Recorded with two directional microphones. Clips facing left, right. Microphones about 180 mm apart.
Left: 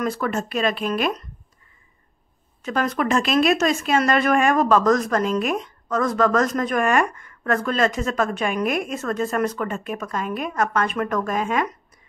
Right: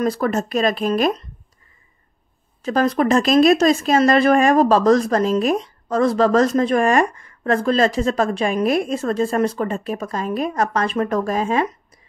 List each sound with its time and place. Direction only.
0.0 s speech: 35° right (ahead or behind)
2.6 s speech: 35° right (ahead or behind)